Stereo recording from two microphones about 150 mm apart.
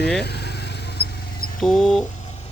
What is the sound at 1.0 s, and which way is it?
Mouse, 90° left.